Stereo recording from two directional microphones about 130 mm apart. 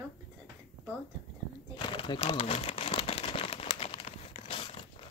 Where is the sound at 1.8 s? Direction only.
40° left (ahead or behind).